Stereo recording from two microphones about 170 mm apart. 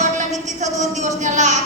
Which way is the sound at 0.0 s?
45° right (ahead or behind).